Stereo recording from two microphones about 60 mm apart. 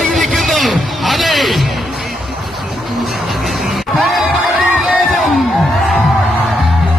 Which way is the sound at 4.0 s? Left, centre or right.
Centre.